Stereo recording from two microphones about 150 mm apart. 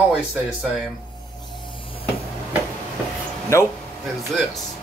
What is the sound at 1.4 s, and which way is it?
Vehicle, 30° left (ahead or behind).